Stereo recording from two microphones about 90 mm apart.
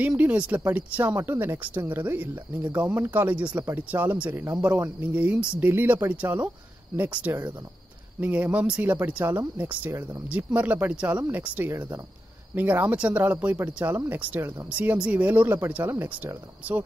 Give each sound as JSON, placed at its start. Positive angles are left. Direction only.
{"t": 0.0, "sound": "speech", "side_deg": -15}
{"t": 10.2, "sound": "speech", "side_deg": -15}